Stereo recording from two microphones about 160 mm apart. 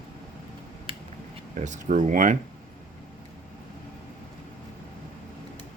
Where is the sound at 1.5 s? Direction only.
50° right (ahead or behind).